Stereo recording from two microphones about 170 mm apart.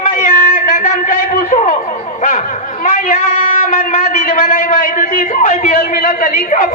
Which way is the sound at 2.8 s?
55° left (ahead or behind).